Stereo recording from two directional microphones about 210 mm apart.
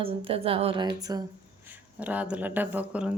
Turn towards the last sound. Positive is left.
turn(degrees=-5)  # may be behind; listen again after turning